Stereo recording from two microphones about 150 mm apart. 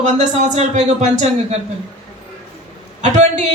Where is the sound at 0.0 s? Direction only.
50° right (ahead or behind).